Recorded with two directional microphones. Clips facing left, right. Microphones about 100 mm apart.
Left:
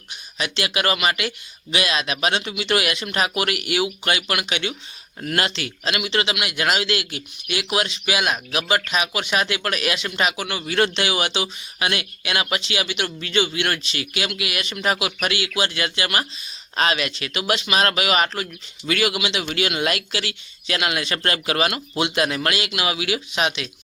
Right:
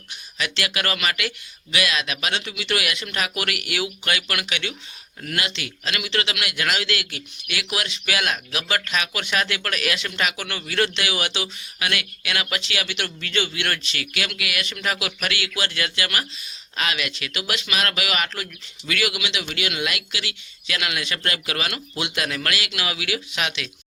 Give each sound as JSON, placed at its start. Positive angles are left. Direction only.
{"t": 0.1, "sound": "speech", "side_deg": 25}
{"t": 5.2, "sound": "speech", "side_deg": 35}